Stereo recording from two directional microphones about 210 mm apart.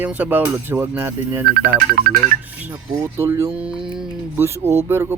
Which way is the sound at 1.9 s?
50° right (ahead or behind).